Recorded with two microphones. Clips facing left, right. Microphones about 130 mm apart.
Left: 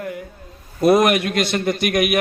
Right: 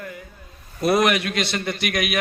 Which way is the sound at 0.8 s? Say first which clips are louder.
Left 5 dB; 45° left (ahead or behind).